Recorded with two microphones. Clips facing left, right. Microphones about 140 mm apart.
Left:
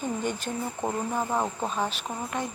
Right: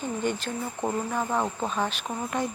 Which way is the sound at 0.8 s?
10° left (ahead or behind).